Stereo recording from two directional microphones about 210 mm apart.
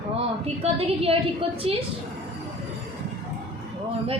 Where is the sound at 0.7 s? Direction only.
25° right (ahead or behind).